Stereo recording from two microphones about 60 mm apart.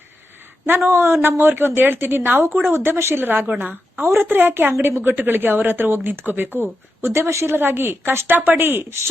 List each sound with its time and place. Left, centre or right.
0.9 s a woman's voice: right
3.4 s a woman's voice: right